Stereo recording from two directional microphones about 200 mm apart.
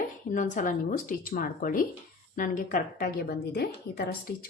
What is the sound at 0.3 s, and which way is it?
A woman's voice, 40° left (ahead or behind).